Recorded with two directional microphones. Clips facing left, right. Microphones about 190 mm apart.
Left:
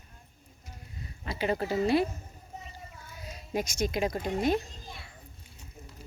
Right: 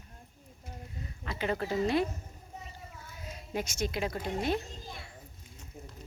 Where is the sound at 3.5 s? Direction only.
15° left (ahead or behind).